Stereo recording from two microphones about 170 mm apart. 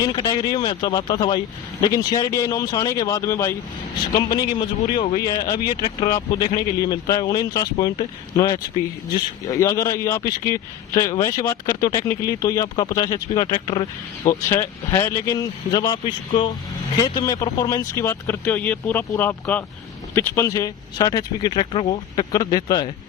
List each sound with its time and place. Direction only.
0.0 s speech: 25° left (ahead or behind)
4.9 s speech: 25° left (ahead or behind)